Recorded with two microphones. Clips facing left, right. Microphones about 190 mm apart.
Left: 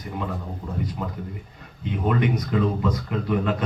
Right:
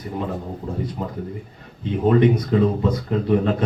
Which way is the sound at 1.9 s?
30° right (ahead or behind).